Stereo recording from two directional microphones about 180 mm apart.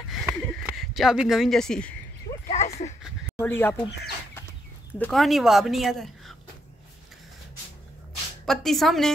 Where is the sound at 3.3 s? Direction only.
10° left (ahead or behind).